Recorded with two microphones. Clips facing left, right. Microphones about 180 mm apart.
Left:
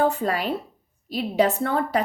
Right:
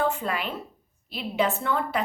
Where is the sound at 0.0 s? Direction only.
40° left (ahead or behind).